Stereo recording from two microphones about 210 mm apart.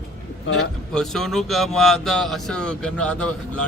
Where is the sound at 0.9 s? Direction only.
Centre (ahead or behind).